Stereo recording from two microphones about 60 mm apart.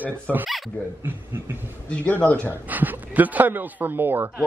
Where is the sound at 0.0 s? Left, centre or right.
Right.